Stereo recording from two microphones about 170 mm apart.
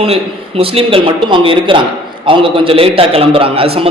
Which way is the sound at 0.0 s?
35° right (ahead or behind).